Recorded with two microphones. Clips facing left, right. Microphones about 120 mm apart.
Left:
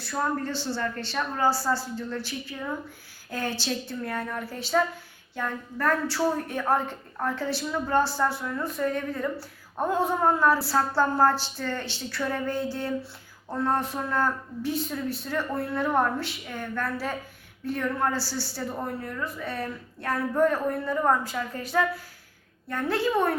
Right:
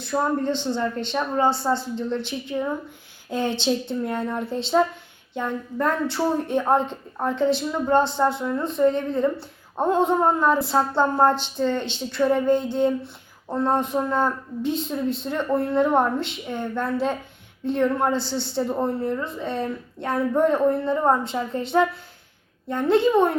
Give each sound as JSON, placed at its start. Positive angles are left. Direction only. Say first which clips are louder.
{"t": 0.0, "sound": "a woman's voice", "louder": "right 5 dB", "side_deg": -20}